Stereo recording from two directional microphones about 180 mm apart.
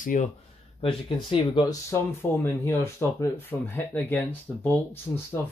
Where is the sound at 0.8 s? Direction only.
30° left (ahead or behind).